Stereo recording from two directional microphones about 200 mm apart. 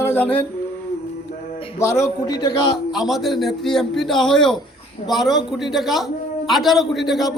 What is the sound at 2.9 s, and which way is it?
A man's voice, centre (ahead or behind).